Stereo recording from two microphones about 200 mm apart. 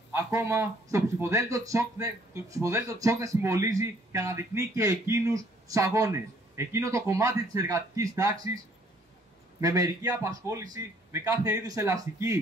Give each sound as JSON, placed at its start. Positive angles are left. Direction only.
{"t": 0.1, "sound": "speech", "side_deg": -15}
{"t": 9.6, "sound": "speech", "side_deg": -15}